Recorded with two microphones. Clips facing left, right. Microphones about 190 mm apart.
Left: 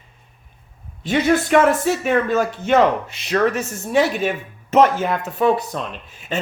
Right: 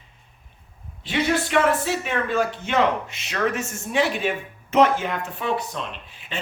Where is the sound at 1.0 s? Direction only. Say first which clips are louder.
Left 5 dB; 45° left (ahead or behind).